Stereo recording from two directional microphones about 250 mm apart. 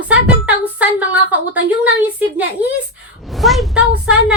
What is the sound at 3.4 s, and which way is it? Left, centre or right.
Speech, centre.